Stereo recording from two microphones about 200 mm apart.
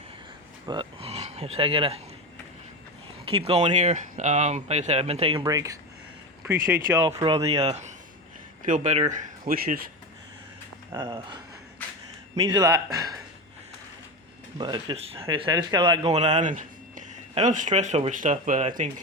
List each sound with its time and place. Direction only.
0.7 s speech: 25° right (ahead or behind)
3.2 s speech: 30° right (ahead or behind); by 7.0 s 10° right (ahead or behind)
7.0 s speech: 25° right (ahead or behind)
9.5 s speech: 45° right (ahead or behind)
10.9 s speech: 25° right (ahead or behind)
12.5 s a man's voice: 15° right (ahead or behind)
14.6 s speech: 20° right (ahead or behind)
16.1 s speech: 35° right (ahead or behind)